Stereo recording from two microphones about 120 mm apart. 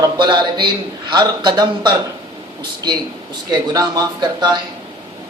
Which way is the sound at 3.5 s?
30° right (ahead or behind).